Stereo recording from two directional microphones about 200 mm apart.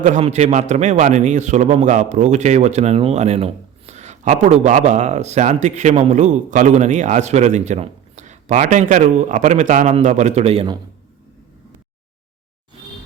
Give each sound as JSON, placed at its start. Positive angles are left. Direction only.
{"t": 0.0, "sound": "a man's voice", "side_deg": -35}